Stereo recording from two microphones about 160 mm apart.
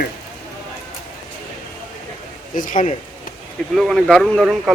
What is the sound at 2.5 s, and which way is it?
Speech, 55° left (ahead or behind).